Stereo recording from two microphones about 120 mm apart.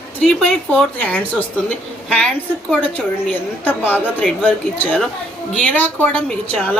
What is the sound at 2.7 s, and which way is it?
A woman's voice, 15° left (ahead or behind).